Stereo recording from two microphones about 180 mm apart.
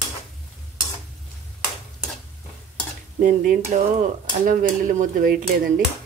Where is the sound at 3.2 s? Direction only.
50° right (ahead or behind).